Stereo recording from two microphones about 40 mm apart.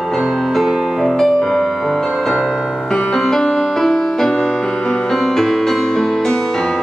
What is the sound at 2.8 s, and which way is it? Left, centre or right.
Music, centre.